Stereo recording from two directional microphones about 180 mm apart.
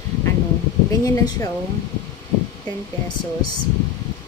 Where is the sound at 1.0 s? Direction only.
20° left (ahead or behind).